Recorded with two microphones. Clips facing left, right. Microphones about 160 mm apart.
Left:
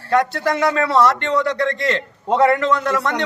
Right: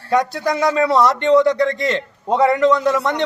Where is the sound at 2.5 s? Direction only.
15° right (ahead or behind).